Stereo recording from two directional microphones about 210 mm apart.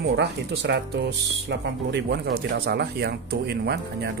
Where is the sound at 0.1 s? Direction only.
55° right (ahead or behind).